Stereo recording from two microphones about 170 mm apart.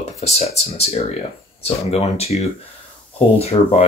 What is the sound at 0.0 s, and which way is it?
Speech, 40° left (ahead or behind).